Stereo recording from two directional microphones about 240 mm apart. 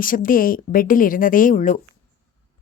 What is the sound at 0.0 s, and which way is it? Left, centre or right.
Speech, left.